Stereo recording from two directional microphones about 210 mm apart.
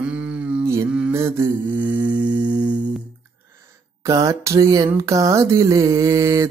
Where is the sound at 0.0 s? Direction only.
5° right (ahead or behind).